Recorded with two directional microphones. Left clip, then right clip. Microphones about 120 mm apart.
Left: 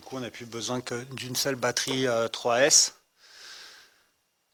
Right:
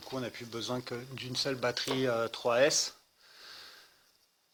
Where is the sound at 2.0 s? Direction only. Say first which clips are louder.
Left 5 dB; 70° left (ahead or behind).